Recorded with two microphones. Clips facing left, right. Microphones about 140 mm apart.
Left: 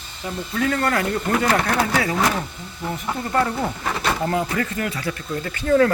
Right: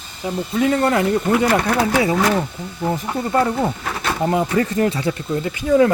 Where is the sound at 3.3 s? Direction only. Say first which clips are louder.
Right 4 dB; 20° right (ahead or behind).